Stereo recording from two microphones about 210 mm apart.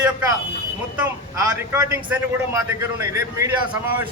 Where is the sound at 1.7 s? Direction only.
15° right (ahead or behind).